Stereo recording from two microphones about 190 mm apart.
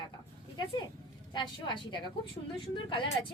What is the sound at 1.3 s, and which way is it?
Speech, 25° left (ahead or behind).